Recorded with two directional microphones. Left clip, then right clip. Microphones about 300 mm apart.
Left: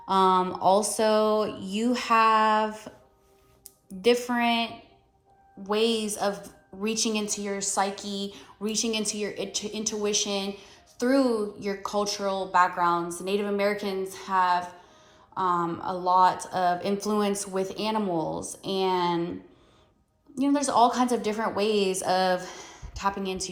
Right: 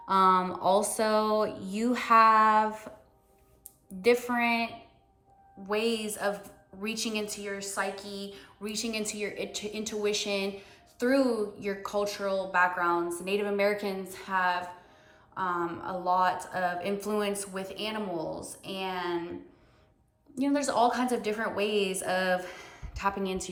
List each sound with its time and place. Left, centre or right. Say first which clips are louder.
0.0 s a woman's voice: left 2 dB; centre
8.7 s speech: left 5 dB; centre
9.2 s a woman's voice: left 3 dB; centre
20.3 s a woman's voice: left 4 dB; centre